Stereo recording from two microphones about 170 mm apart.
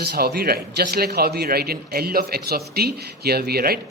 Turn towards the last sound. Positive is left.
turn(degrees=-65)  # may be behind; listen again after turning